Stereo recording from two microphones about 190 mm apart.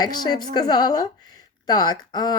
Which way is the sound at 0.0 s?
20° left (ahead or behind).